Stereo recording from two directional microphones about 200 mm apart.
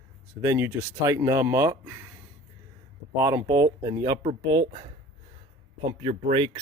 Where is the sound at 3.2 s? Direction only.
15° right (ahead or behind).